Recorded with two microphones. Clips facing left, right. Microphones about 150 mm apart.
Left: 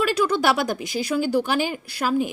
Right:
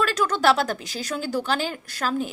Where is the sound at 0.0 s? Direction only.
10° left (ahead or behind).